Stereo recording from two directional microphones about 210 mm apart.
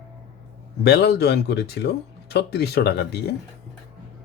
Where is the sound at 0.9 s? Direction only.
50° left (ahead or behind).